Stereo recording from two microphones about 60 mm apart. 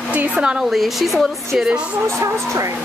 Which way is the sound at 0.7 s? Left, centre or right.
Centre.